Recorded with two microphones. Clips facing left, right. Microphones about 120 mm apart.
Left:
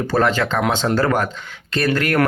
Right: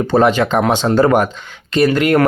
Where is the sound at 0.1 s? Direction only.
20° right (ahead or behind).